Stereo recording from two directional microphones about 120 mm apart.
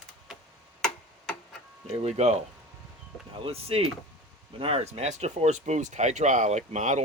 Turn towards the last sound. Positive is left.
turn(degrees=-80)